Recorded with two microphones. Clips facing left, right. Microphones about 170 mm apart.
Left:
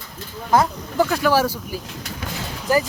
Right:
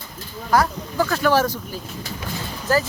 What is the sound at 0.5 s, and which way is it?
Speech, 25° left (ahead or behind).